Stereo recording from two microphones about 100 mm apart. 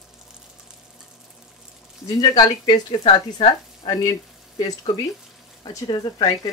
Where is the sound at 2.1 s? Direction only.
45° left (ahead or behind).